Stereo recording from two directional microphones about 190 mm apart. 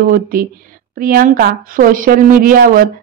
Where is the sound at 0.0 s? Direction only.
45° right (ahead or behind).